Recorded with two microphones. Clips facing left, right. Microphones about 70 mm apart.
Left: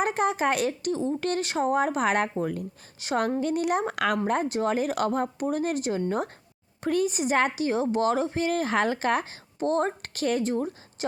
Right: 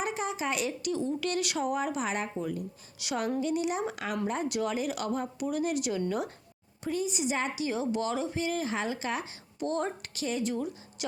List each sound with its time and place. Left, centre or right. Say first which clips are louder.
0.0 s a woman's voice: left 8 dB; left
3.0 s a woman's voice: left 5 dB; left
4.4 s a woman's voice: left 5 dB; left
6.8 s a woman's voice: left 6 dB; left